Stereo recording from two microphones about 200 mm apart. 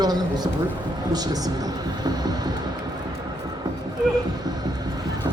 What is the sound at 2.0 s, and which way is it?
Music, 20° right (ahead or behind).